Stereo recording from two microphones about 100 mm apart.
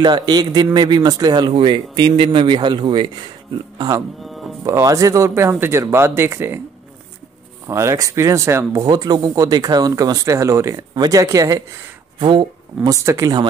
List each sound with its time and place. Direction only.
0.0 s speech: 45° right (ahead or behind)
4.2 s music: centre (ahead or behind)
4.6 s speech: 30° right (ahead or behind)
7.6 s speech: 30° right (ahead or behind)
8.8 s speech: 40° right (ahead or behind)
12.2 s speech: 55° right (ahead or behind)
12.9 s speech: 30° right (ahead or behind)